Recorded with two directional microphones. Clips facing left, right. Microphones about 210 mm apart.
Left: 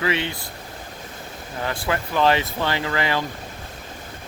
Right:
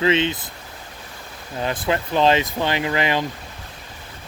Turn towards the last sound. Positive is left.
turn(degrees=-20)  # may be behind; listen again after turning